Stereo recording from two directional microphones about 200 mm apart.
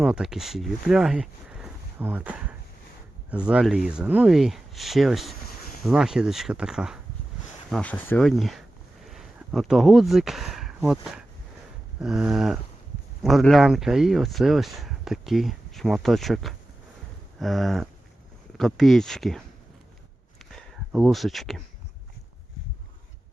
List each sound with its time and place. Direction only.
0.0 s speech: 5° right (ahead or behind)
11.9 s speech: 5° right (ahead or behind)
20.4 s a sound: centre (ahead or behind)